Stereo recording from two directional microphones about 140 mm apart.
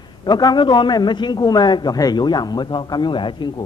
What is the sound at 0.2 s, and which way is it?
A man's voice, 30° left (ahead or behind).